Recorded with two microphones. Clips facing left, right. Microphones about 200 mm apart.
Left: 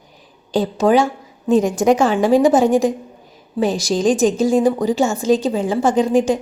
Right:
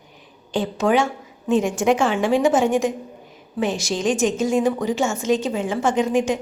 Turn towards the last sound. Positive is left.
turn(degrees=35)  # may be behind; listen again after turning